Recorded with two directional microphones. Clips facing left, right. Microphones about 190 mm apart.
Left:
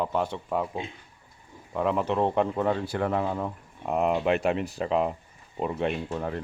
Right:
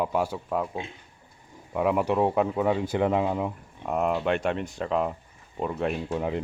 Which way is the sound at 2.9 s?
15° right (ahead or behind).